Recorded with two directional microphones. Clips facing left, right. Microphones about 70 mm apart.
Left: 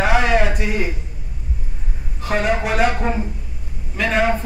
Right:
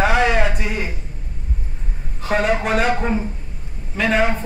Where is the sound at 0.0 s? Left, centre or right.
Centre.